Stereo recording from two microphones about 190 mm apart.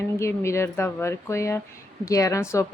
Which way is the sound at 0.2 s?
15° left (ahead or behind).